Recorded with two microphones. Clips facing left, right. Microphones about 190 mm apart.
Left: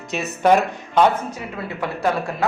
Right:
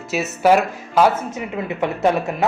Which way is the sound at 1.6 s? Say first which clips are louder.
Right 4 dB; 20° right (ahead or behind).